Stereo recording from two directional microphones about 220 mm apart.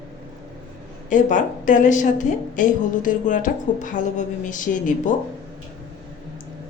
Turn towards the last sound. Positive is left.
turn(degrees=35)  # may be behind; listen again after turning